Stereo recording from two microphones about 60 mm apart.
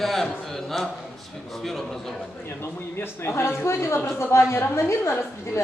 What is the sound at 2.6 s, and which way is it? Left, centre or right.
Speech, left.